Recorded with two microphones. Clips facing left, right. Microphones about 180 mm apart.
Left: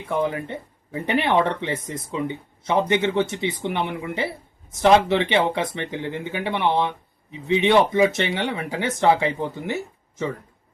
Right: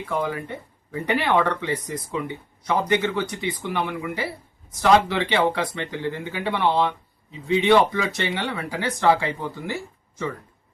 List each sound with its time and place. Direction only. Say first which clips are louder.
0.0 s speech: left 2 dB; 25° left (ahead or behind)